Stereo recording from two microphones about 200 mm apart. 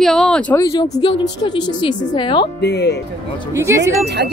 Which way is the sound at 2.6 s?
55° left (ahead or behind).